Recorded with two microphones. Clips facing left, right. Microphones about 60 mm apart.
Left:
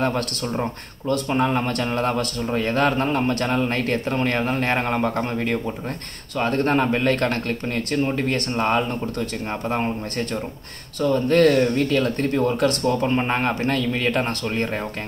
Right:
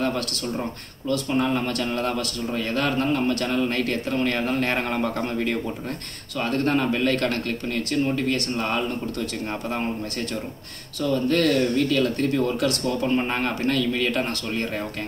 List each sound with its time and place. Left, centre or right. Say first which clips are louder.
1.3 s a man's voice: left 2 dB; left